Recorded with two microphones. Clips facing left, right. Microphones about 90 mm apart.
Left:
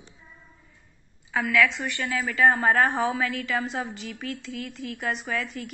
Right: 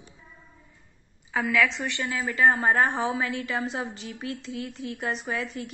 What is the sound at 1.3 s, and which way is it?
Speech, 10° right (ahead or behind).